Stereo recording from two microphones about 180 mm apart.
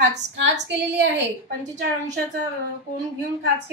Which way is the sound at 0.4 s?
75° right (ahead or behind).